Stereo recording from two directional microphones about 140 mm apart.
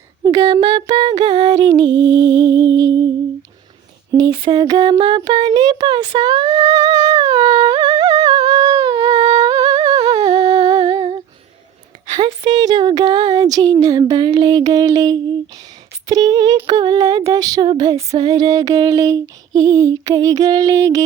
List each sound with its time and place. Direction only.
0.4 s music: 35° right (ahead or behind)
4.1 s a sound: 25° right (ahead or behind)
16.0 s female singing: 30° right (ahead or behind)